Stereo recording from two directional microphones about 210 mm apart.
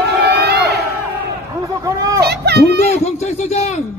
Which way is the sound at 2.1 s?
50° right (ahead or behind).